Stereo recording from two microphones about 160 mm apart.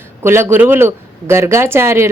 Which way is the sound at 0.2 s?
15° right (ahead or behind).